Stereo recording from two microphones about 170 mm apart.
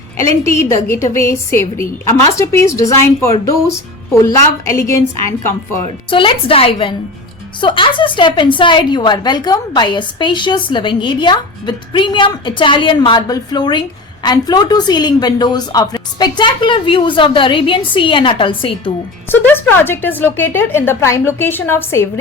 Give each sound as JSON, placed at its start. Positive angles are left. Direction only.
{"t": 0.4, "sound": "speech", "side_deg": 15}
{"t": 6.1, "sound": "a woman's voice", "side_deg": 30}
{"t": 19.3, "sound": "speech", "side_deg": 10}